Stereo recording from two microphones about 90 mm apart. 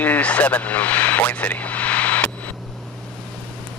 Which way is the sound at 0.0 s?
15° left (ahead or behind).